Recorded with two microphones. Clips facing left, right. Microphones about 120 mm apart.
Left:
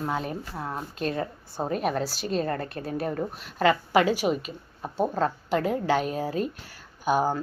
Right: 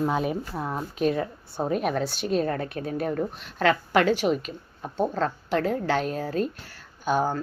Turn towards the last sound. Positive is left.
turn(degrees=10)  # may be behind; listen again after turning